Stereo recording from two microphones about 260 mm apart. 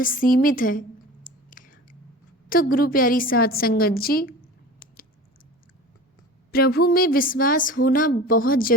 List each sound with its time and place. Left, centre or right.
0.0 s a sound: left
2.5 s speech: left
6.5 s speech: left